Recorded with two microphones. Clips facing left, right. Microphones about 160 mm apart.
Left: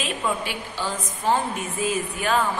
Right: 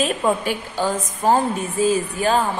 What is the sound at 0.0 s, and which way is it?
A woman's voice, 45° right (ahead or behind).